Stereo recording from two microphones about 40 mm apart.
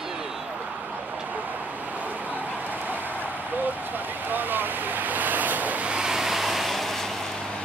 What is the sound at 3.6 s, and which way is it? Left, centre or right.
Waves, right.